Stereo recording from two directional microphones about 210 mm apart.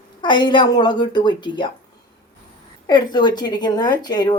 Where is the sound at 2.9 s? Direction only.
20° left (ahead or behind).